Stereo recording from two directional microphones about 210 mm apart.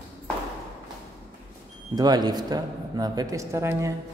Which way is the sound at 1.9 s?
20° right (ahead or behind).